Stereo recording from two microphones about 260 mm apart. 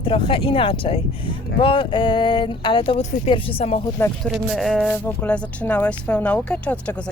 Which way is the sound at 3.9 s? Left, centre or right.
Centre.